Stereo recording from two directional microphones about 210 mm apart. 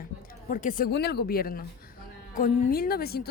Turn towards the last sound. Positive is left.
turn(degrees=45)  # may be behind; listen again after turning